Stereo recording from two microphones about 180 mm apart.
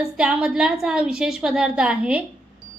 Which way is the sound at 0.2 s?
5° right (ahead or behind).